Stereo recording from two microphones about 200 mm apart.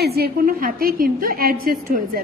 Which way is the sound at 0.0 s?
50° right (ahead or behind).